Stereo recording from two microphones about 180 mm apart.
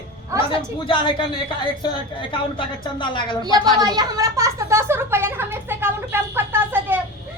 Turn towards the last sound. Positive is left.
turn(degrees=-10)  # may be behind; listen again after turning